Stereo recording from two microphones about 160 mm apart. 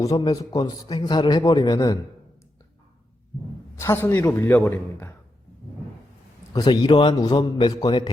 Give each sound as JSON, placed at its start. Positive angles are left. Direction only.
{"t": 0.0, "sound": "a man's voice", "side_deg": 20}
{"t": 3.8, "sound": "a man's voice", "side_deg": 15}
{"t": 6.5, "sound": "a man's voice", "side_deg": 25}